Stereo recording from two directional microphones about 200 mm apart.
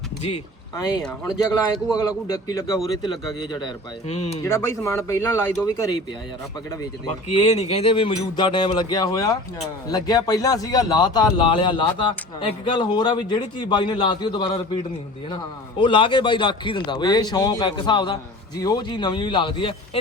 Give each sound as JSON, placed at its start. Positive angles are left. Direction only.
{"t": 1.0, "sound": "speech", "side_deg": 0}
{"t": 1.9, "sound": "a man's voice", "side_deg": 20}
{"t": 4.1, "sound": "speech", "side_deg": 30}
{"t": 4.4, "sound": "a man's voice", "side_deg": 15}
{"t": 7.4, "sound": "a man's voice", "side_deg": 35}
{"t": 15.8, "sound": "a man's voice", "side_deg": 25}